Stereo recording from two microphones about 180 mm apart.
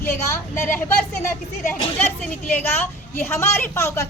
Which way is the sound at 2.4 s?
10° left (ahead or behind).